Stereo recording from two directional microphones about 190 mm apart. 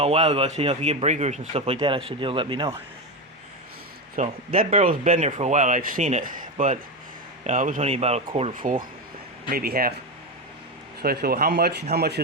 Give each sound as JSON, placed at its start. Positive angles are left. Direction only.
{"t": 0.0, "sound": "a man's voice", "side_deg": -30}
{"t": 4.1, "sound": "a man's voice", "side_deg": -45}
{"t": 9.5, "sound": "speech", "side_deg": -50}
{"t": 11.0, "sound": "speech", "side_deg": -55}